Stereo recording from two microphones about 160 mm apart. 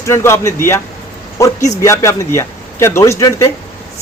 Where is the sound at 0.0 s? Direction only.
15° left (ahead or behind).